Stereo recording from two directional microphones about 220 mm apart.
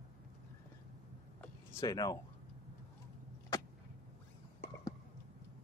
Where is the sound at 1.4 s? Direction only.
15° left (ahead or behind).